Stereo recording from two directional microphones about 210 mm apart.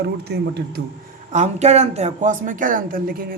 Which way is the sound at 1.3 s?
30° right (ahead or behind).